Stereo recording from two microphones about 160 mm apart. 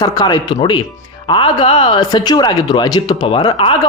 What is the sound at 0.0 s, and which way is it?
Speech, 25° left (ahead or behind).